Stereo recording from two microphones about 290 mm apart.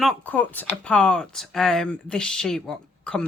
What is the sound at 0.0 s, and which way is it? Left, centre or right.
Speech, centre.